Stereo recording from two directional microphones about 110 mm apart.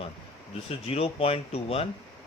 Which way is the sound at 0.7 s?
65° left (ahead or behind).